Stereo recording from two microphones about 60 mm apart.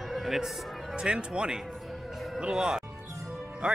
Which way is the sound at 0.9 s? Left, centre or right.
Centre.